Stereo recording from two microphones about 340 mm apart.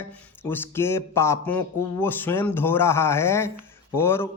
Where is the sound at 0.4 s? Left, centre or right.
Centre.